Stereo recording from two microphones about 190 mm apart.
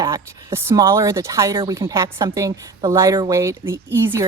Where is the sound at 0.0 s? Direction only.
15° right (ahead or behind).